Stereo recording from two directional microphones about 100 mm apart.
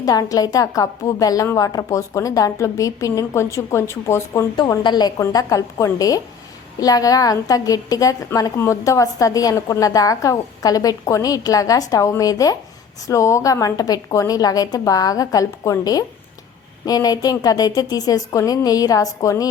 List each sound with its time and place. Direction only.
0.0 s a woman's voice: 35° left (ahead or behind)
4.8 s a woman's voice: 45° left (ahead or behind)
5.3 s a woman's voice: 35° left (ahead or behind)